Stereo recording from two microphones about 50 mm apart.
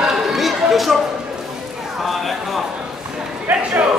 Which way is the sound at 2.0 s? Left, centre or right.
Centre.